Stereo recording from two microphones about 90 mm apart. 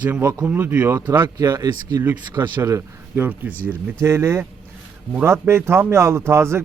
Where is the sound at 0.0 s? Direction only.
25° right (ahead or behind).